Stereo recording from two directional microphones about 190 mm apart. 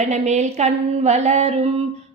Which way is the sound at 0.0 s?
35° right (ahead or behind).